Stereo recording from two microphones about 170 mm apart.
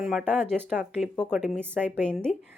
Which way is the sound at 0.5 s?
10° right (ahead or behind).